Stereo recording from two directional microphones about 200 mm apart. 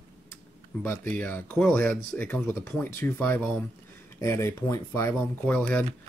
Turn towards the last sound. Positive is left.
turn(degrees=5)  # may be behind; listen again after turning